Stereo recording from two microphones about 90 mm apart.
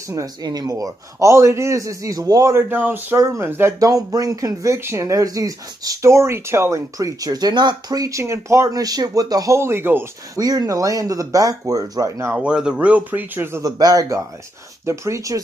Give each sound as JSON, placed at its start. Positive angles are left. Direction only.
{"t": 0.1, "sound": "speech", "side_deg": -45}
{"t": 2.5, "sound": "speech", "side_deg": -20}
{"t": 3.2, "sound": "speech", "side_deg": -30}
{"t": 3.8, "sound": "speech", "side_deg": -45}
{"t": 9.6, "sound": "speech", "side_deg": -25}
{"t": 10.3, "sound": "speech", "side_deg": -45}
{"t": 12.4, "sound": "speech", "side_deg": -10}
{"t": 13.6, "sound": "speech", "side_deg": -45}